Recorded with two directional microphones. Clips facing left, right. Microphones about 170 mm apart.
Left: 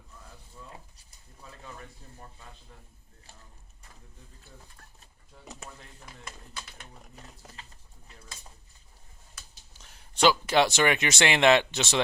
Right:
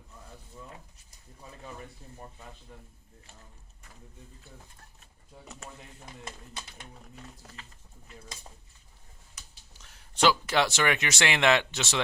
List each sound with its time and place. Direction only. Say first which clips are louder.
7.5 s pigeon: right 1 dB; 35° left (ahead or behind)
9.8 s speech: left 2 dB; 20° left (ahead or behind)